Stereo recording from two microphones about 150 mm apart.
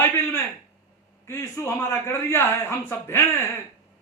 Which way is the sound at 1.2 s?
20° left (ahead or behind).